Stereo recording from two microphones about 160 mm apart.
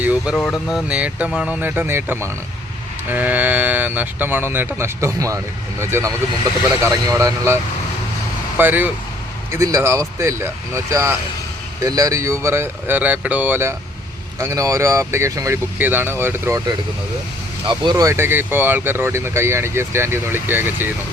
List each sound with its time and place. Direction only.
0.0 s a sound: 10° right (ahead or behind)
0.3 s speech: 5° left (ahead or behind)
0.7 s speech: 5° right (ahead or behind)
17.7 s speech: 25° right (ahead or behind)